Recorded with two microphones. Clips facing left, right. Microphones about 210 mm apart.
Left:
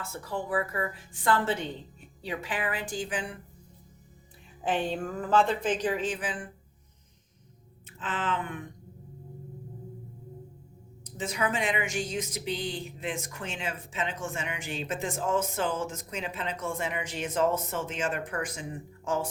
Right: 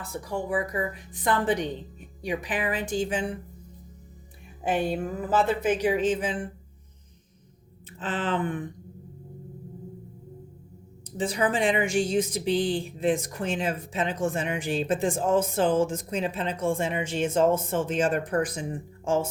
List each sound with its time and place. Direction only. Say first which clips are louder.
0.1 s a woman's voice: right 3 dB; 15° right (ahead or behind)
4.6 s a woman's voice: right 3 dB; 10° right (ahead or behind)
7.9 s a woman's voice: right 4 dB; 35° right (ahead or behind)
11.2 s a woman's voice: right 5 dB; 30° right (ahead or behind)